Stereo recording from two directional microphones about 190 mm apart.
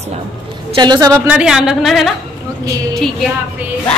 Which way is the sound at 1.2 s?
5° right (ahead or behind).